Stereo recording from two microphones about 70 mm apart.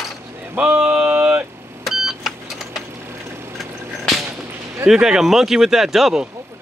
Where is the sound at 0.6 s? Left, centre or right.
Centre.